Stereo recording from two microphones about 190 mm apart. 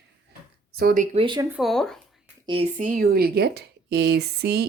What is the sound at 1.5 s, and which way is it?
Speech, centre (ahead or behind).